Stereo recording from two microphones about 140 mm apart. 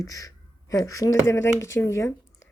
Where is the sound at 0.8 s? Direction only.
20° left (ahead or behind).